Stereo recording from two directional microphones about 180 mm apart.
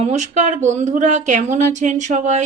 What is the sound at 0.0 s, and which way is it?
A woman's voice, 40° right (ahead or behind).